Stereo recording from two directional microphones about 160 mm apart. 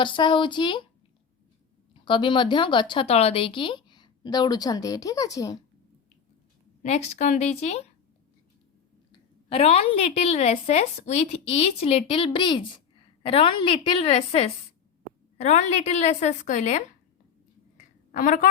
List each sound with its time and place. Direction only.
0.0 s a woman's voice: 30° left (ahead or behind)
1.9 s a woman's voice: 30° left (ahead or behind)
6.8 s a woman's voice: 45° left (ahead or behind)
9.5 s a woman's voice: 40° left (ahead or behind)
17.7 s a sound: 55° left (ahead or behind)